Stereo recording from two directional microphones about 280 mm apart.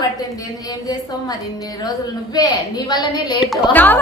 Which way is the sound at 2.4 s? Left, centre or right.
Centre.